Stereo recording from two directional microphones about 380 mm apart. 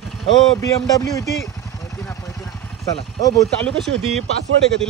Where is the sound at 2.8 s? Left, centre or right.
Centre.